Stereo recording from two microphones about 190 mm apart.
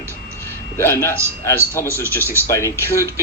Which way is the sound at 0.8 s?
10° left (ahead or behind).